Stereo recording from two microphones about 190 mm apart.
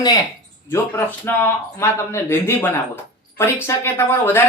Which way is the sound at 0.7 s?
10° left (ahead or behind).